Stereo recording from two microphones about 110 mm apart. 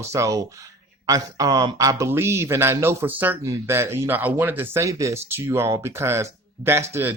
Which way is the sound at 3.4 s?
25° right (ahead or behind).